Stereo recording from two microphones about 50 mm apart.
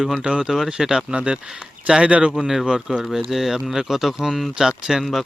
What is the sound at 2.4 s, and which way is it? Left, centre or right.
Speech, centre.